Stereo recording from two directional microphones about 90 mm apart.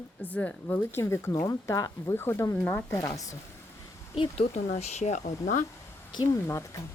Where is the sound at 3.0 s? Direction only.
40° left (ahead or behind).